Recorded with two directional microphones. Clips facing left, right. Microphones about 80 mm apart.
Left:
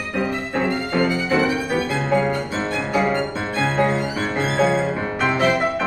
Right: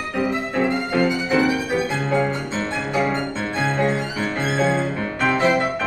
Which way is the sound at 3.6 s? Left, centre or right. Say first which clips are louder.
Left 2 dB; centre.